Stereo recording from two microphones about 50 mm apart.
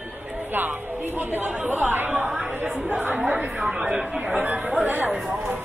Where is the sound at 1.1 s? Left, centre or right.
Right.